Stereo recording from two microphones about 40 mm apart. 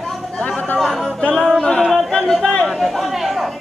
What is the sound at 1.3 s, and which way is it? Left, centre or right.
Music, centre.